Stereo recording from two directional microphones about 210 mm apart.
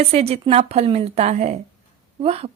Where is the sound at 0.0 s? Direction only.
30° right (ahead or behind).